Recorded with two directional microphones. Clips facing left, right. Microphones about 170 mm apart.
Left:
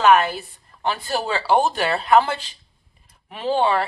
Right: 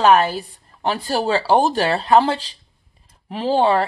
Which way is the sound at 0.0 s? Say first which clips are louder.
Right 1 dB; 35° right (ahead or behind).